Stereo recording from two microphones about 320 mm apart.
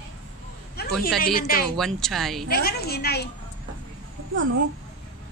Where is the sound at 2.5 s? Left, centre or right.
Left.